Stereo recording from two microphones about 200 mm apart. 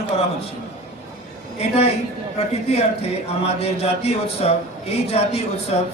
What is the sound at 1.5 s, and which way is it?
A man's voice, 30° left (ahead or behind).